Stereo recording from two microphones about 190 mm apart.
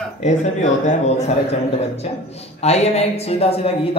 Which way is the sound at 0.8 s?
35° left (ahead or behind).